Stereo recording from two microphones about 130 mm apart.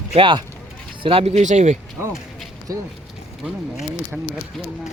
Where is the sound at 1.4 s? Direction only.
60° right (ahead or behind).